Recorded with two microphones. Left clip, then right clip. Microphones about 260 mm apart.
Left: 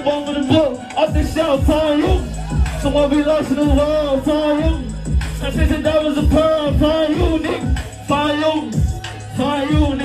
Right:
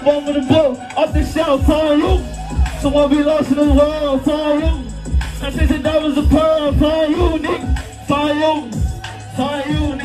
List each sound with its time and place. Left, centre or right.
0.0 s music: right